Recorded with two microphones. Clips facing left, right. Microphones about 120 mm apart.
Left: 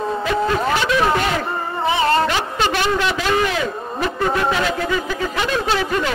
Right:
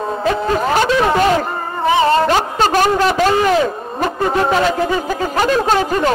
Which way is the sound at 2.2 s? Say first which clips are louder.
Right 5 dB; 40° right (ahead or behind).